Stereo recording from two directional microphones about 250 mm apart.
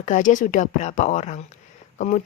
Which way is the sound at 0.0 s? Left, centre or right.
Left.